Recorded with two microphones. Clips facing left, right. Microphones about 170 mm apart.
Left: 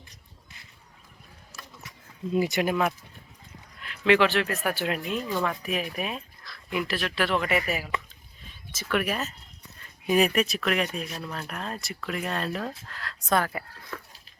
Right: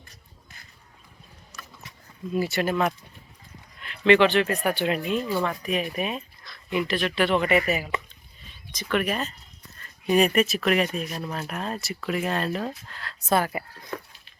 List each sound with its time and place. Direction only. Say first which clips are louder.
2.3 s speech: even; 15° left (ahead or behind)
3.8 s speech: right 3 dB; 5° left (ahead or behind)
13.5 s speech: right 4 dB; 15° right (ahead or behind)